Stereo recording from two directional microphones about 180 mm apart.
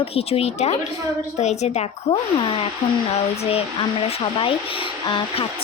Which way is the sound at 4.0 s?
30° left (ahead or behind).